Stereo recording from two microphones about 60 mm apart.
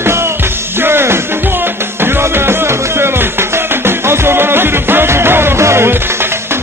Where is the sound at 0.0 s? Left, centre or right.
Right.